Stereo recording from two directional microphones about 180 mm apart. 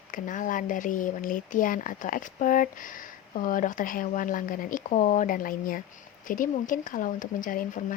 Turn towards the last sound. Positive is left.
turn(degrees=50)  # may be behind; listen again after turning